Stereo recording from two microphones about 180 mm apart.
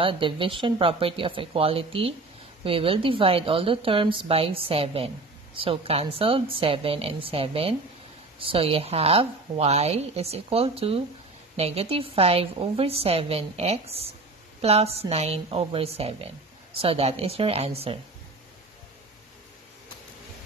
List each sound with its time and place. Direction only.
0.0 s a woman's voice: 30° right (ahead or behind)